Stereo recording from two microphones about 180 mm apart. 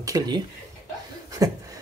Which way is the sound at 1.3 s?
20° right (ahead or behind).